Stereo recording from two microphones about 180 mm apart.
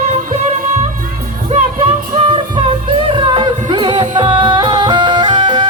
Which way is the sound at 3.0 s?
25° right (ahead or behind).